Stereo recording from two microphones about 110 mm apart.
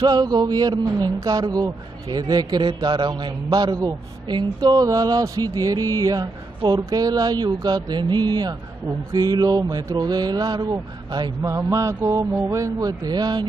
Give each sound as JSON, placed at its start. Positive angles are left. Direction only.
{"t": 0.0, "sound": "a man's voice", "side_deg": -40}